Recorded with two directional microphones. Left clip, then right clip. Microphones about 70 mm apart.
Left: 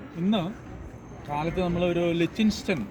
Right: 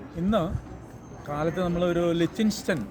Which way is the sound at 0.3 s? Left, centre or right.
Right.